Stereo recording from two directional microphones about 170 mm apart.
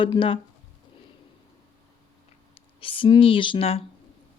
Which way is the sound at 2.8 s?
30° left (ahead or behind).